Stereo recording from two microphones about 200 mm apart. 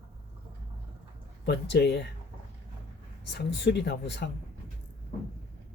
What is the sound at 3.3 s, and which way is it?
Speech, 60° left (ahead or behind).